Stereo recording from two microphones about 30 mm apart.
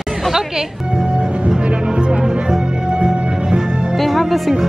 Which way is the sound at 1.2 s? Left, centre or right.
Right.